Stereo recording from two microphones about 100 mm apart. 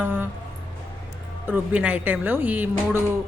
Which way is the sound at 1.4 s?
20° right (ahead or behind).